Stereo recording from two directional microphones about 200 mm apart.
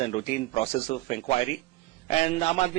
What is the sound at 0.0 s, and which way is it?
A man's voice, 30° left (ahead or behind).